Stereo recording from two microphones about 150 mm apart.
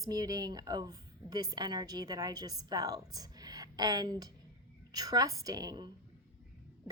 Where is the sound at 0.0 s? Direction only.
25° right (ahead or behind).